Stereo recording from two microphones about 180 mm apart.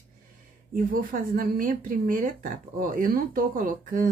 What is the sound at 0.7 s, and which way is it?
Speech, 50° right (ahead or behind).